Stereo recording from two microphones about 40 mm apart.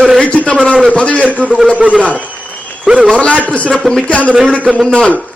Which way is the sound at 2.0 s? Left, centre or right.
Left.